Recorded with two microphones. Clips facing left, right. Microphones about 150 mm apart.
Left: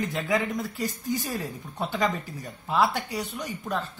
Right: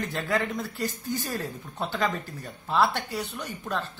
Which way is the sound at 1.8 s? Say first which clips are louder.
Left 1 dB; 15° left (ahead or behind).